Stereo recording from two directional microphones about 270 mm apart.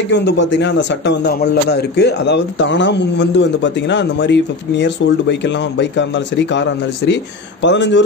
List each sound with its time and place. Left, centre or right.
0.1 s a man's voice: left